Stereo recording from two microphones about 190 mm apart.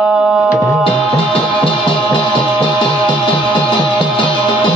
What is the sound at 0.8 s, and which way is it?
Music, 30° left (ahead or behind).